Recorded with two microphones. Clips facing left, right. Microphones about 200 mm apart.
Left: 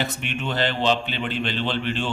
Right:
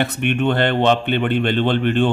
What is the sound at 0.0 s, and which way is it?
Speech, 60° right (ahead or behind).